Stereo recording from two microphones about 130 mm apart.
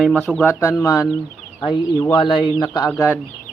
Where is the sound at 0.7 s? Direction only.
25° left (ahead or behind).